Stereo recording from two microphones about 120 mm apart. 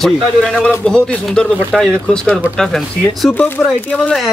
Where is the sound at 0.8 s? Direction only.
5° left (ahead or behind).